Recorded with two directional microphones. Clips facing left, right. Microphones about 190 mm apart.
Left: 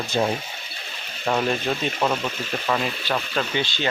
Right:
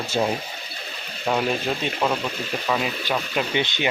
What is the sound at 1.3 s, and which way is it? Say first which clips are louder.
Speech: even; 5° right (ahead or behind).